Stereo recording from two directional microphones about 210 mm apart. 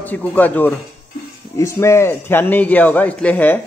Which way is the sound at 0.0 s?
10° left (ahead or behind).